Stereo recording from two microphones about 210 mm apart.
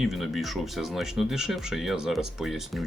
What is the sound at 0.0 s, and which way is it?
Speech, centre (ahead or behind).